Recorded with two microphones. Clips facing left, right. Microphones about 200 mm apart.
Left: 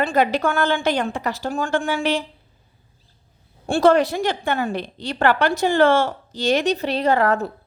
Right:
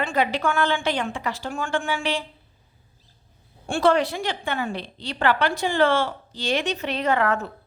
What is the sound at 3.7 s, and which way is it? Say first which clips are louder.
A woman's voice: left 4 dB; 45° left (ahead or behind).